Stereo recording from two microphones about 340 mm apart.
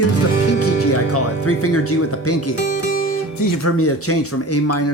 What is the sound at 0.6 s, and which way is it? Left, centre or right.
Music, left.